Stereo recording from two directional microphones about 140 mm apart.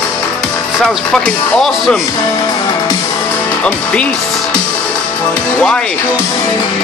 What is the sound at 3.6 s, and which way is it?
Speech, 10° left (ahead or behind).